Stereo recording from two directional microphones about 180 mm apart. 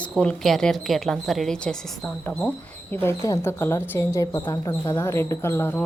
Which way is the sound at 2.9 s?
15° left (ahead or behind).